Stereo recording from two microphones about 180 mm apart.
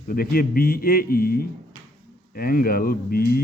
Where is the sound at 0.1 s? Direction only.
55° left (ahead or behind).